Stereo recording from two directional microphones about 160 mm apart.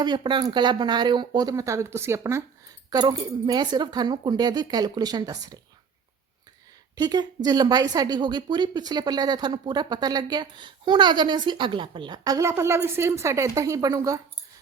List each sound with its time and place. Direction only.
0.0 s a woman's voice: 30° right (ahead or behind)
6.9 s a woman's voice: 25° right (ahead or behind)